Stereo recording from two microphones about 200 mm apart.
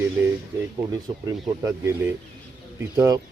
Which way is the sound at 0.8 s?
20° right (ahead or behind).